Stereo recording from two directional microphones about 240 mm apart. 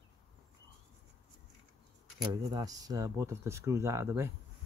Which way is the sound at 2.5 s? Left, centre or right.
Centre.